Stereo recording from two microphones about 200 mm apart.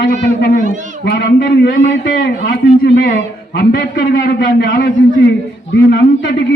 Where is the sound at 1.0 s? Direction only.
45° left (ahead or behind).